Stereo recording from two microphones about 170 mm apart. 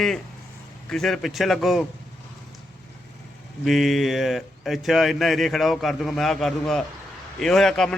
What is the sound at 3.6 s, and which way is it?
Speech, centre (ahead or behind).